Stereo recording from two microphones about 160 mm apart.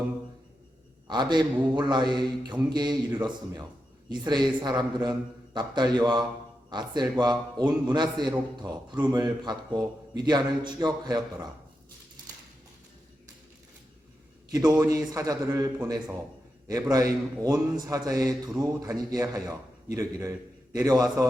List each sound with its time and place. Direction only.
1.0 s a man's voice: 30° right (ahead or behind)
14.5 s a man's voice: 25° right (ahead or behind)